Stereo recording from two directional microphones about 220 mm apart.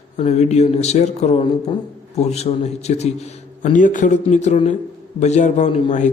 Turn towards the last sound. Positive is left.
turn(degrees=35)  # may be behind; listen again after turning